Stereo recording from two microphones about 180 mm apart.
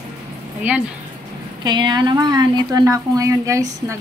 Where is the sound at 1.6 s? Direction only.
25° right (ahead or behind).